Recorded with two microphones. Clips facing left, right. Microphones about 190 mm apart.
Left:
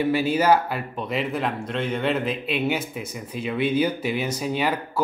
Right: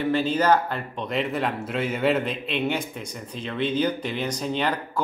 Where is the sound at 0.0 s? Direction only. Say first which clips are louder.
Left 1 dB; 10° left (ahead or behind).